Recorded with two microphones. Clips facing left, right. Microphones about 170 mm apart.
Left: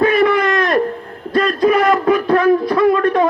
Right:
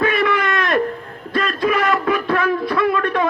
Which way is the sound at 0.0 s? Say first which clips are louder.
Left 5 dB; 35° left (ahead or behind).